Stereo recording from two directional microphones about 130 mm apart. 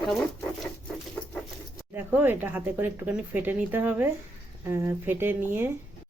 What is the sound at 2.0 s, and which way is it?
Speech, 15° right (ahead or behind).